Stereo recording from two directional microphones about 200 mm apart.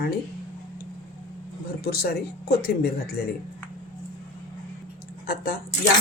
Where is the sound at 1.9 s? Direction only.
50° left (ahead or behind).